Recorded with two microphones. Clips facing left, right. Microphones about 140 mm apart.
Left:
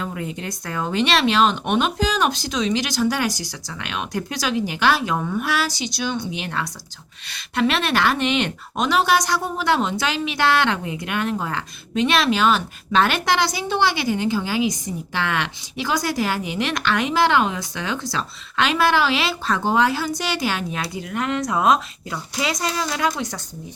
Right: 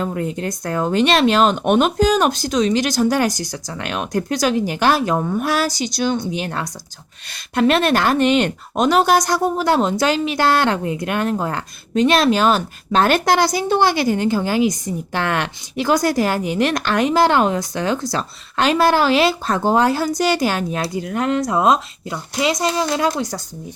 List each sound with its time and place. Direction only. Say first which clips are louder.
0.0 s speech: right 6 dB; 45° right (ahead or behind)